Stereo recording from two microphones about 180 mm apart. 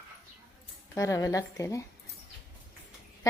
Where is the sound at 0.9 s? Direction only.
20° left (ahead or behind).